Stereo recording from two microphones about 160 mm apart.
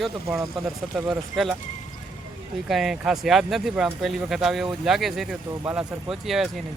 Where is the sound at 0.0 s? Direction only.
Centre (ahead or behind).